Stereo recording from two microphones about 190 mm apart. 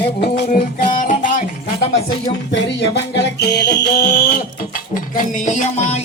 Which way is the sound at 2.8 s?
60° left (ahead or behind).